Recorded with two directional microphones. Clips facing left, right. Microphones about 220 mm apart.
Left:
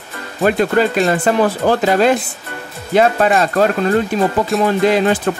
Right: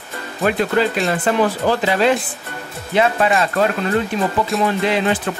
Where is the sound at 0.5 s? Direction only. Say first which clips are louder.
Left 3 dB; 45° left (ahead or behind).